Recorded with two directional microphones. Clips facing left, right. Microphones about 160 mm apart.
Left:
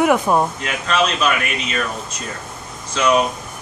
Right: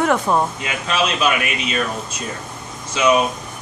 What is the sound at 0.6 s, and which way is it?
Speech, 10° right (ahead or behind).